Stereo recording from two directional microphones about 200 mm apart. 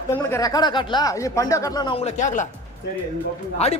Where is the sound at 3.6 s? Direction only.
30° left (ahead or behind).